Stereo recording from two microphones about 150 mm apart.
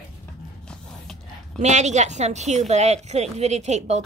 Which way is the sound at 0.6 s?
5° left (ahead or behind).